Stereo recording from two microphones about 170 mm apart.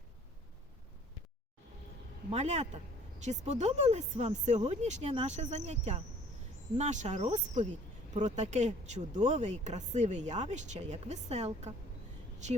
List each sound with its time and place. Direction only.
2.3 s speech: 40° right (ahead or behind)